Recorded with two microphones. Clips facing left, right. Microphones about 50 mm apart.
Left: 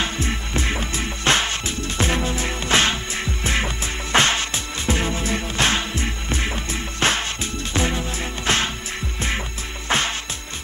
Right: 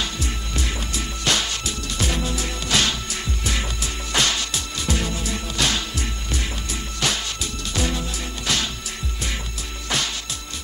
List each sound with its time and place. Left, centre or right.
0.0 s music: left
9.8 s music: left